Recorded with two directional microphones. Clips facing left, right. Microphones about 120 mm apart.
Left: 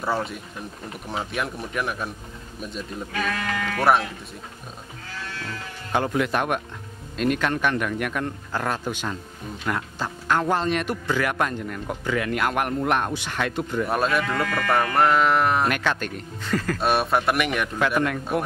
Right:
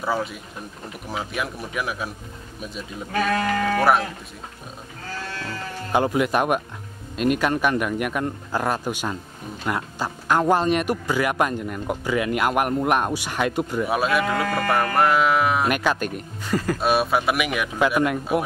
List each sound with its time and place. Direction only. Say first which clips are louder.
0.0 s speech: right 1 dB; centre (ahead or behind)
3.1 s speech: right 7 dB; 40° right (ahead or behind)
5.3 s sheep: right 2 dB; 40° right (ahead or behind)
5.9 s speech: right 3 dB; 10° right (ahead or behind)